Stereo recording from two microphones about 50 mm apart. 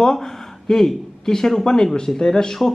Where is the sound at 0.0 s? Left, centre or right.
Centre.